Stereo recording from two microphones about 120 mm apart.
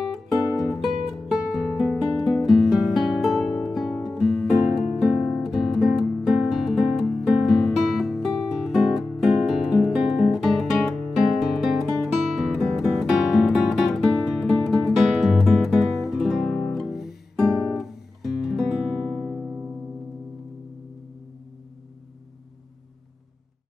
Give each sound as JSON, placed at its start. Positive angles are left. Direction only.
{"t": 0.1, "sound": "music", "side_deg": 0}